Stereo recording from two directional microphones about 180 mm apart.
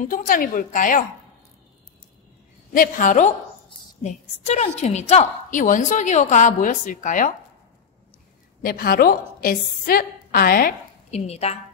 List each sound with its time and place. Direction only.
0.0 s a woman's voice: 50° left (ahead or behind)
2.7 s a woman's voice: 45° left (ahead or behind)
8.6 s a woman's voice: 55° left (ahead or behind)
11.1 s a woman's voice: 35° left (ahead or behind)